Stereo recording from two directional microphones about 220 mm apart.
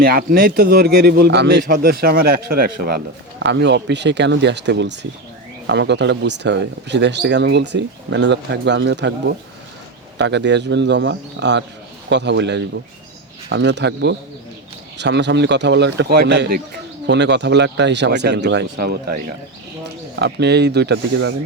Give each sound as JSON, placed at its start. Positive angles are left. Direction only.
{"t": 0.0, "sound": "a man's voice", "side_deg": -40}
{"t": 10.2, "sound": "a man's voice", "side_deg": -55}